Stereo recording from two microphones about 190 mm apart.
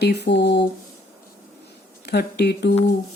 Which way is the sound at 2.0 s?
60° left (ahead or behind).